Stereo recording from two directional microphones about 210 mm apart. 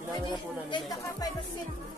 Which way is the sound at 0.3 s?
20° left (ahead or behind).